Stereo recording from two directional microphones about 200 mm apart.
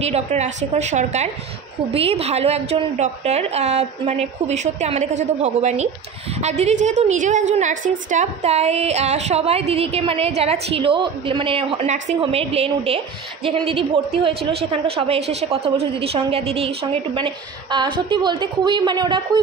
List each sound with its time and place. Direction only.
0.0 s a woman's voice: 35° right (ahead or behind)